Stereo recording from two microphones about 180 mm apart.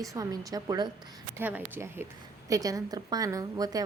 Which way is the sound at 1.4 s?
10° right (ahead or behind).